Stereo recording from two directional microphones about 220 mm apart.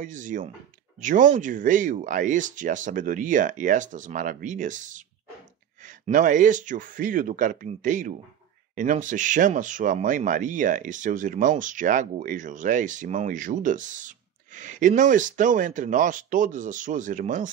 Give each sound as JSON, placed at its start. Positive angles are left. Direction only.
{"t": 0.0, "sound": "speech", "side_deg": -35}